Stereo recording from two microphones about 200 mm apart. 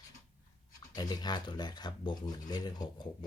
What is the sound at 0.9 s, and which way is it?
Speech, 20° left (ahead or behind).